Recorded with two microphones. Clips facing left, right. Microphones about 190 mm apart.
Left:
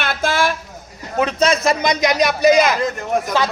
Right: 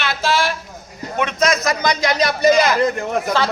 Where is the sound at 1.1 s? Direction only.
35° left (ahead or behind).